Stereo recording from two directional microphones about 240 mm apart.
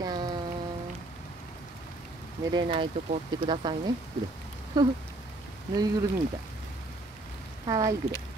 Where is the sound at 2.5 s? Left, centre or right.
Right.